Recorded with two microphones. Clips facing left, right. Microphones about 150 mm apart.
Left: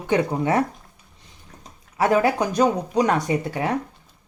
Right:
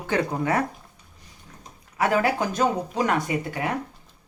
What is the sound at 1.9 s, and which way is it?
Speech, 20° left (ahead or behind).